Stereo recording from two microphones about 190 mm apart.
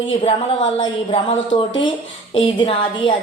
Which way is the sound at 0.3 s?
25° left (ahead or behind).